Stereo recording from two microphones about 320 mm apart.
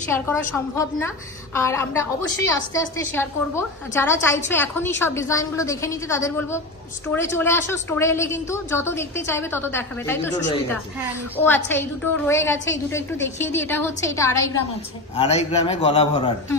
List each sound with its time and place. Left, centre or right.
0.1 s a woman's voice: centre